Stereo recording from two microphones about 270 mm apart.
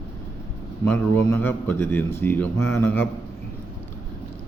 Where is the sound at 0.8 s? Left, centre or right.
Centre.